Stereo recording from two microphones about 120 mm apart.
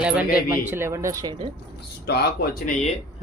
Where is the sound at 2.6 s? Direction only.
70° left (ahead or behind).